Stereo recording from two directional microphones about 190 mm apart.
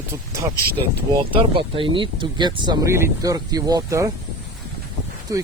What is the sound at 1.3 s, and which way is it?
Speech, 25° right (ahead or behind).